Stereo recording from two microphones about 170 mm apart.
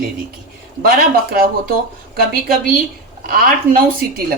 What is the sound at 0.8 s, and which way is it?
Speech, 60° right (ahead or behind).